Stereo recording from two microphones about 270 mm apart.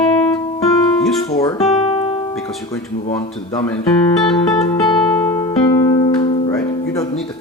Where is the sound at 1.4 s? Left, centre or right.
Centre.